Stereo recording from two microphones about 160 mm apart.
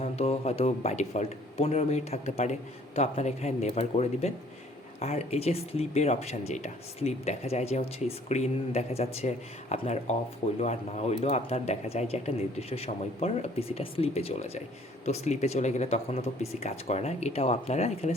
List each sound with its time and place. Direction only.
0.0 s a man's voice: 40° left (ahead or behind)